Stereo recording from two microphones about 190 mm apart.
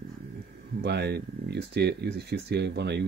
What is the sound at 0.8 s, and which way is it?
Speech, 60° right (ahead or behind).